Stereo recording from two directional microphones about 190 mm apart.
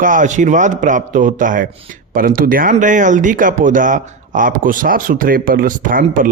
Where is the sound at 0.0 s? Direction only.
45° right (ahead or behind).